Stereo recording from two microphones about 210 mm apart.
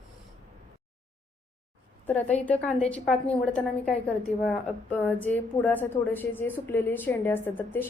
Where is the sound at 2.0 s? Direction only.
10° left (ahead or behind).